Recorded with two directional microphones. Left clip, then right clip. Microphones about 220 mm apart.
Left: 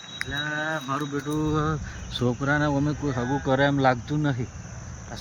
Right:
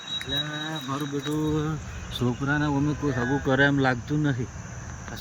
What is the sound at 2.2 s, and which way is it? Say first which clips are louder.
Speech: left 2 dB; centre (ahead or behind).